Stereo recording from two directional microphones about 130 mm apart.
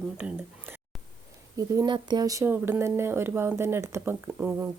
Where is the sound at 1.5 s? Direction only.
30° right (ahead or behind).